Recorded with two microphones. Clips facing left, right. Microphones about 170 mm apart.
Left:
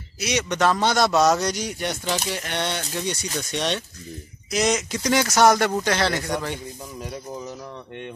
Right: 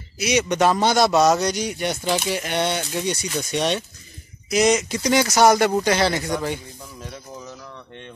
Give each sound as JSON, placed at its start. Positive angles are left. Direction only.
{"t": 0.2, "sound": "a man's voice", "side_deg": -10}